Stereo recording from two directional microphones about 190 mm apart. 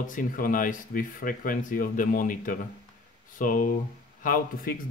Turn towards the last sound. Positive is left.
turn(degrees=45)  # may be behind; listen again after turning